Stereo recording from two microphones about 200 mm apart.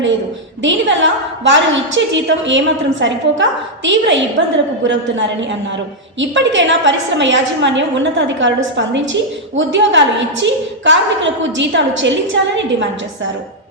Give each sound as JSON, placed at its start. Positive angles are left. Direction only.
{"t": 0.6, "sound": "a woman's voice", "side_deg": -65}